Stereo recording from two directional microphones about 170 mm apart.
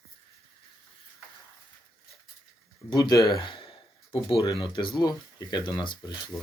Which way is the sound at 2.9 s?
20° left (ahead or behind).